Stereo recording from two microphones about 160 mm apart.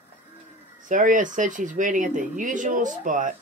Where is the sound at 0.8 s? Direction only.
55° right (ahead or behind).